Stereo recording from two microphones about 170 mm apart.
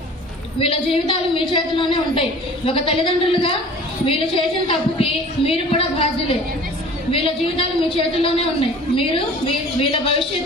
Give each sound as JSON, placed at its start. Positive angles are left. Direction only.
{"t": 0.9, "sound": "a woman's voice", "side_deg": 30}